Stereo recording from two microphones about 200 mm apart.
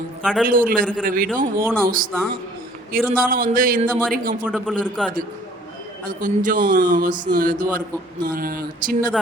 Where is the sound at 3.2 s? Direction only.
45° right (ahead or behind).